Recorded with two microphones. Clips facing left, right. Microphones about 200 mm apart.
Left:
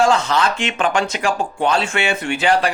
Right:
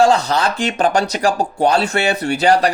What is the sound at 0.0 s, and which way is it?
Speech, 35° right (ahead or behind).